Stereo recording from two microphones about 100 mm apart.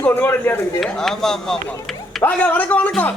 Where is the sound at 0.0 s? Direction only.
20° left (ahead or behind).